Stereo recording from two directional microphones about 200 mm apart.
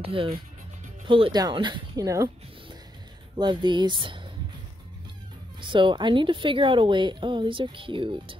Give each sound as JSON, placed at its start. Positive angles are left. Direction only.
{"t": 0.0, "sound": "a woman's voice", "side_deg": -25}
{"t": 3.3, "sound": "a woman's voice", "side_deg": -25}
{"t": 5.6, "sound": "a woman's voice", "side_deg": -25}